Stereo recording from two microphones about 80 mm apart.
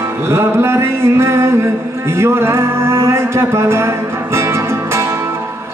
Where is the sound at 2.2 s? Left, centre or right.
Right.